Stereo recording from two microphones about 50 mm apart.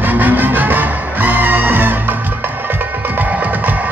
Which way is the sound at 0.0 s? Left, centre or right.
Right.